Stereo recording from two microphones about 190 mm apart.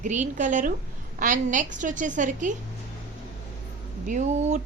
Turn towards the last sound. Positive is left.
turn(degrees=-40)  # may be behind; listen again after turning